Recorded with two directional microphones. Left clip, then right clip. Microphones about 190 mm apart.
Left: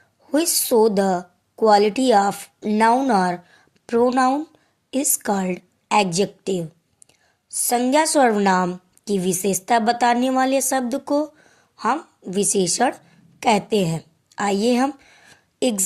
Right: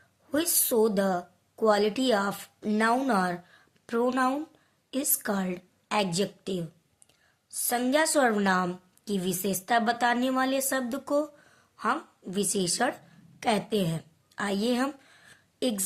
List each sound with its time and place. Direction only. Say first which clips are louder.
0.3 s a woman's voice: left 8 dB; 30° left (ahead or behind)